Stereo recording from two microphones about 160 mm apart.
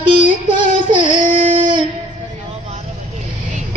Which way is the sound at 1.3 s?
35° right (ahead or behind).